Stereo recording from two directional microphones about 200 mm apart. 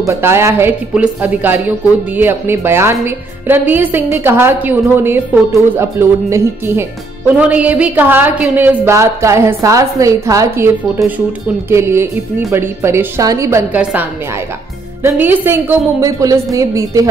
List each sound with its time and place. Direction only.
0.0 s a woman's voice: 15° right (ahead or behind)
15.0 s a woman's voice: 10° right (ahead or behind)